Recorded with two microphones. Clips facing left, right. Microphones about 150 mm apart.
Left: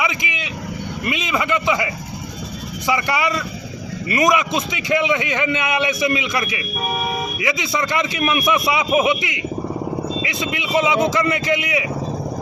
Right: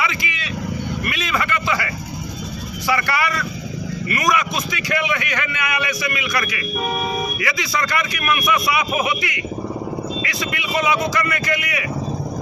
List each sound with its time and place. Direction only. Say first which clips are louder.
0.0 s vehicle: left 1 dB; 20° left (ahead or behind)
1.0 s a man's voice: left 5 dB; 20° left (ahead or behind)